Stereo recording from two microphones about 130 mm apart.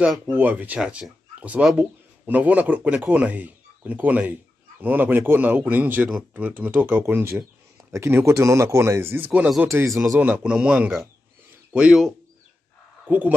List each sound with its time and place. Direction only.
0.3 s speech: 15° right (ahead or behind)
11.5 s a sound: 5° right (ahead or behind)
13.0 s speech: 15° right (ahead or behind)